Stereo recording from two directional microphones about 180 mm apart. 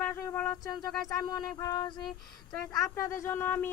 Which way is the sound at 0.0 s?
15° left (ahead or behind).